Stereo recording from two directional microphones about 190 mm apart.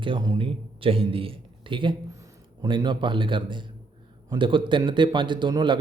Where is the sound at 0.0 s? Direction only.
25° right (ahead or behind).